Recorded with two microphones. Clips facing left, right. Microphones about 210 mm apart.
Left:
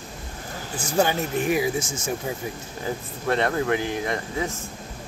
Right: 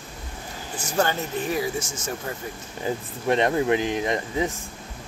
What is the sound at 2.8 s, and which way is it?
Speech, 15° right (ahead or behind).